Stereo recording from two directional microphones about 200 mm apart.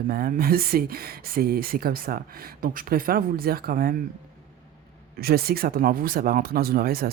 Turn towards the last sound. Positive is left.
turn(degrees=-50)  # may be behind; listen again after turning